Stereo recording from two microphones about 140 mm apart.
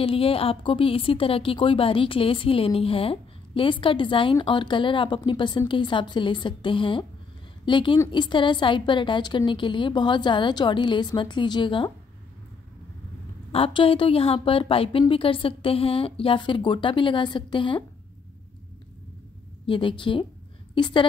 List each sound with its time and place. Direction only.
0.0 s a woman's voice: 40° left (ahead or behind)
13.5 s a woman's voice: 40° left (ahead or behind)
19.6 s a woman's voice: 35° left (ahead or behind)